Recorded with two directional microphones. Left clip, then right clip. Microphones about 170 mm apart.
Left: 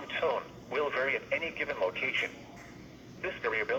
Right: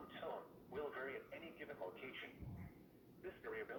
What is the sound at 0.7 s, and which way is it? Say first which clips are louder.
Speech: left 17 dB; 25° left (ahead or behind).